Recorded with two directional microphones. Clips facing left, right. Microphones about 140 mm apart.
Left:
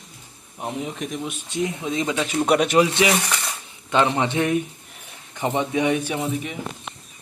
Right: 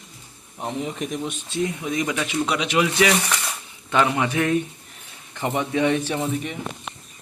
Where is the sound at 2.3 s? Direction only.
50° left (ahead or behind).